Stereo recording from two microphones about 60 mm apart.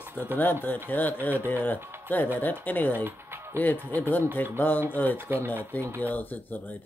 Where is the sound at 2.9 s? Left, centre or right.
Right.